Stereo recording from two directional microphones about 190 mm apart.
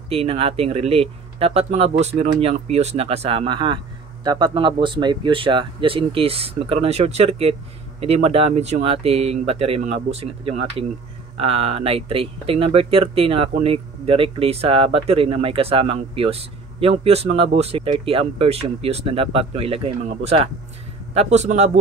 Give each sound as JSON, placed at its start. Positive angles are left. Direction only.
{"t": 0.1, "sound": "speech", "side_deg": -30}